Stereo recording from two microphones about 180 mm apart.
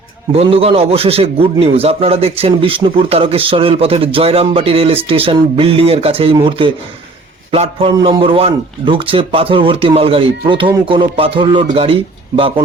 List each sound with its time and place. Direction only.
0.3 s a man's voice: 35° right (ahead or behind)